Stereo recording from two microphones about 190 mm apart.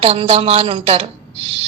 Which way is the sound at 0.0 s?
30° right (ahead or behind).